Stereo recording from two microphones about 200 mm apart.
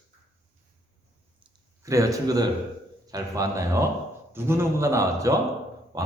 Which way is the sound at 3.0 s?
20° right (ahead or behind).